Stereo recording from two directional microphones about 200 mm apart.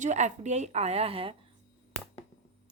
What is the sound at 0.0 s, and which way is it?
A woman's voice, 35° right (ahead or behind).